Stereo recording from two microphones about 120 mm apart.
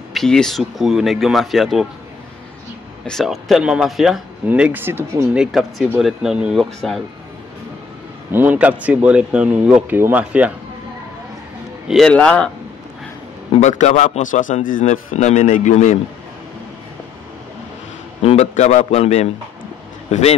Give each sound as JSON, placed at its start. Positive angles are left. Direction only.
{"t": 0.1, "sound": "speech", "side_deg": 5}
{"t": 3.1, "sound": "speech", "side_deg": 0}
{"t": 4.5, "sound": "speech", "side_deg": -15}
{"t": 5.4, "sound": "speech", "side_deg": 0}
{"t": 8.3, "sound": "speech", "side_deg": -15}
{"t": 11.9, "sound": "a man's voice", "side_deg": 5}
{"t": 13.5, "sound": "a man's voice", "side_deg": 75}
{"t": 18.2, "sound": "a man's voice", "side_deg": 60}